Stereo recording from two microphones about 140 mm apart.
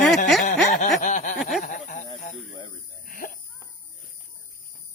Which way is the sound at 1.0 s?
65° left (ahead or behind).